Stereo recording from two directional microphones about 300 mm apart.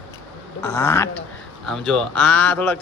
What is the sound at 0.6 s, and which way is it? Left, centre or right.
A man's voice, centre.